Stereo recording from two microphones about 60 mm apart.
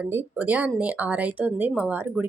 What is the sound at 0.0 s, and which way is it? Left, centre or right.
Speech, right.